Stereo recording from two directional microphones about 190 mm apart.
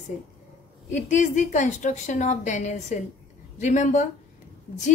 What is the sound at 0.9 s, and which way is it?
A woman's voice, 40° left (ahead or behind).